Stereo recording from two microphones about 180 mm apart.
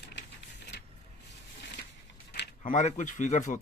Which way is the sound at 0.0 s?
75° left (ahead or behind).